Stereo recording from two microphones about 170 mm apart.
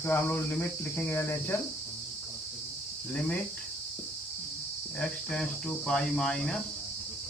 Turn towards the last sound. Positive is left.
turn(degrees=5)  # may be behind; listen again after turning